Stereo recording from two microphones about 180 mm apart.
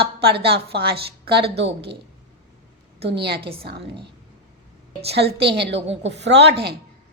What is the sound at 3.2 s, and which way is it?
Speech, 65° right (ahead or behind).